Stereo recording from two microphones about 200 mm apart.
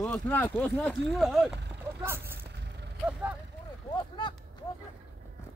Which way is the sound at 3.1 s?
5° right (ahead or behind).